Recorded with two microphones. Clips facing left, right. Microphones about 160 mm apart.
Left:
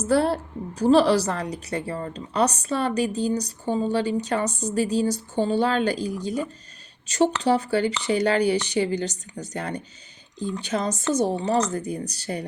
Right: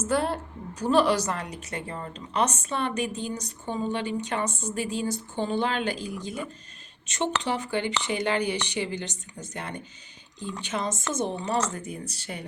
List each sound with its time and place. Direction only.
0.0 s a woman's voice: 35° left (ahead or behind)